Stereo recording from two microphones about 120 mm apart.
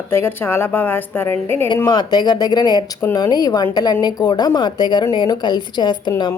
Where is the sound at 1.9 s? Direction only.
35° left (ahead or behind).